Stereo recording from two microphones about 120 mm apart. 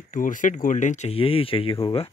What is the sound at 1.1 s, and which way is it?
Speech, 50° left (ahead or behind).